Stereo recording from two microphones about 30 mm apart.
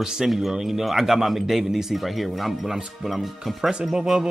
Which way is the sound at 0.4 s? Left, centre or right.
Centre.